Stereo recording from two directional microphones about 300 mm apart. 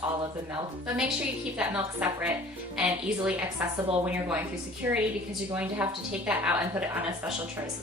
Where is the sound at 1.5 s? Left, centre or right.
Centre.